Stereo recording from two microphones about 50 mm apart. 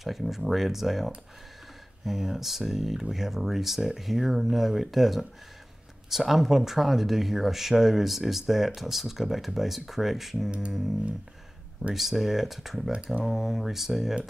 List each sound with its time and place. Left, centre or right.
0.0 s speech: centre
11.9 s speech: centre
12.9 s speech: right
13.2 s speech: centre